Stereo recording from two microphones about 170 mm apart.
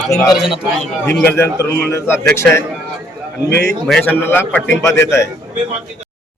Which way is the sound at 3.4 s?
80° left.